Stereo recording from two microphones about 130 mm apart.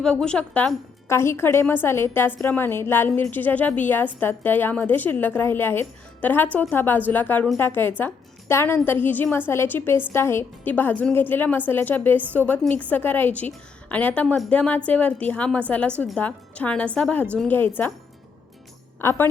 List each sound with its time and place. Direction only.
0.0 s a woman's voice: 5° left (ahead or behind)
1.0 s a woman's voice: 20° left (ahead or behind)
19.0 s a woman's voice: 15° left (ahead or behind)